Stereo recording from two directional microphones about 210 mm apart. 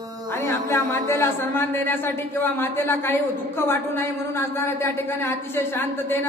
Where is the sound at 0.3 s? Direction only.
10° left (ahead or behind).